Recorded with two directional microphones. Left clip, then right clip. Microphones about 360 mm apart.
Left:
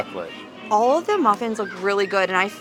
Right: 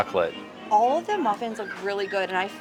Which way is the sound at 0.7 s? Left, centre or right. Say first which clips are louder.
Left 3 dB; left.